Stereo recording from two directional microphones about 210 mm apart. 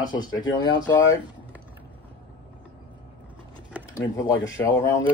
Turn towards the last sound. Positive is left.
turn(degrees=15)  # may be behind; listen again after turning